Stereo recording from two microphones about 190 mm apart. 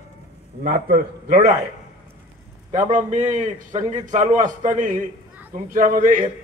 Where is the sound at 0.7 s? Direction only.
45° right (ahead or behind).